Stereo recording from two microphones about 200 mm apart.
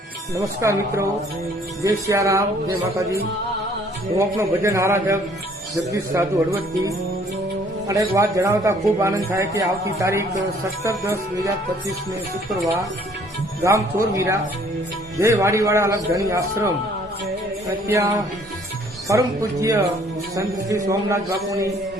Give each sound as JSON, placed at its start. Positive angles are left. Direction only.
{"t": 0.3, "sound": "a man's voice", "side_deg": -15}
{"t": 4.4, "sound": "a man's voice", "side_deg": -15}
{"t": 13.7, "sound": "a man's voice", "side_deg": -15}
{"t": 17.8, "sound": "a man's voice", "side_deg": -15}